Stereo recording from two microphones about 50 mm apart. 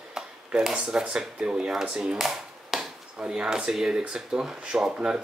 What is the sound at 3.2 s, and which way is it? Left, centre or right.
Speech, centre.